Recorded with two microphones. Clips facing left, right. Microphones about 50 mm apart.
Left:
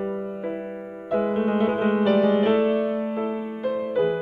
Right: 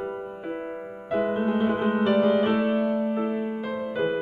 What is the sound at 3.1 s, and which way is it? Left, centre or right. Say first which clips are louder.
Music: even; centre.